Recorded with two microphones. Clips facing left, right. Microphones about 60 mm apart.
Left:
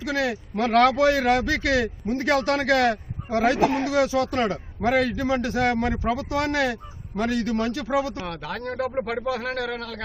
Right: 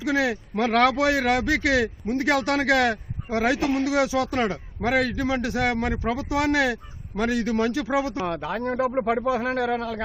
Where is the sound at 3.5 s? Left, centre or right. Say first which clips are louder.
Left 2 dB; left.